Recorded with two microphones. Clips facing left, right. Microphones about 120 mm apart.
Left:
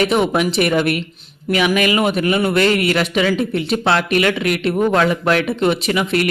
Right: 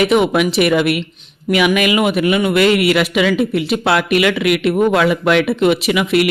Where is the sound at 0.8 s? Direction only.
40° left (ahead or behind).